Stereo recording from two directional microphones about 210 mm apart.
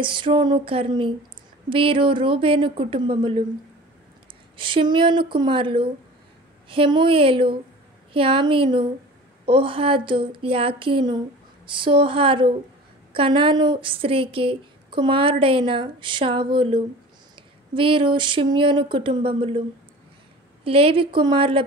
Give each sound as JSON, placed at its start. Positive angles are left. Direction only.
{"t": 0.0, "sound": "speech", "side_deg": -25}
{"t": 4.6, "sound": "speech", "side_deg": -25}
{"t": 20.6, "sound": "speech", "side_deg": -25}